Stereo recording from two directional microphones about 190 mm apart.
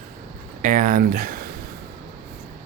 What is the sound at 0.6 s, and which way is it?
Speech, 45° right (ahead or behind).